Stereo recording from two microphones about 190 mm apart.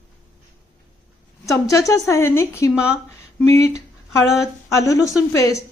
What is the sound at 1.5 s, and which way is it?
A woman's voice, 15° left (ahead or behind).